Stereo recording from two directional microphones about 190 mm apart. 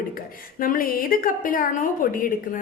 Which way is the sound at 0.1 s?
50° left (ahead or behind).